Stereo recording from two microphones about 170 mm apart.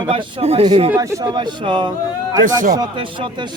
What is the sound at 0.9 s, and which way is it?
Speech, 20° right (ahead or behind).